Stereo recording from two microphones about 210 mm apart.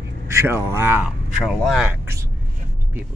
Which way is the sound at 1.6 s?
Centre (ahead or behind).